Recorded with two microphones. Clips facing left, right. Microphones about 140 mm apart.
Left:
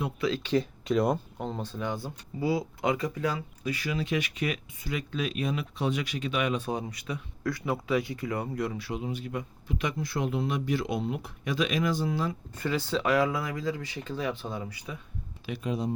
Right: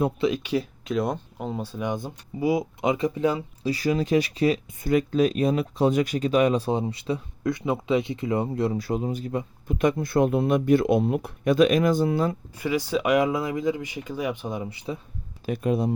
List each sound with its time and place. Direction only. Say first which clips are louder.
0.2 s speech: right 3 dB; 15° right (ahead or behind)
3.7 s speech: right 8 dB; 35° right (ahead or behind)
4.8 s speech: right 13 dB; 45° right (ahead or behind); by 8.8 s 30° right (ahead or behind)
8.8 s speech: right 7 dB; 40° right (ahead or behind)
9.6 s speech: right 10 dB; 50° right (ahead or behind)
12.5 s speech: right 3 dB; 10° right (ahead or behind)
15.4 s speech: right 7 dB; 50° right (ahead or behind)